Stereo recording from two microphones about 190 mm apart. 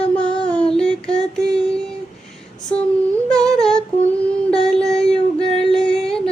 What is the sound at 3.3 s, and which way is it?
Humming, 5° left (ahead or behind).